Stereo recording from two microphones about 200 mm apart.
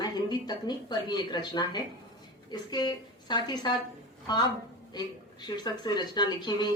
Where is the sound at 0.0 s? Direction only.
20° left (ahead or behind).